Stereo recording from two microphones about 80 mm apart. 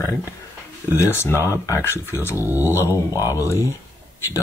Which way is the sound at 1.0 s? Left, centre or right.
Left.